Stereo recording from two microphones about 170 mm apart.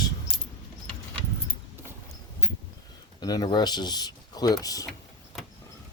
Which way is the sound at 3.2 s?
25° left (ahead or behind).